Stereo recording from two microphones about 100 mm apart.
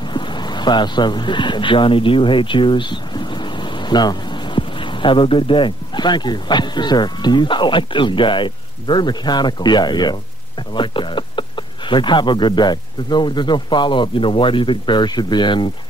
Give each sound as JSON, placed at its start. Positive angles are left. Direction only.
{"t": 0.1, "sound": "speech", "side_deg": 50}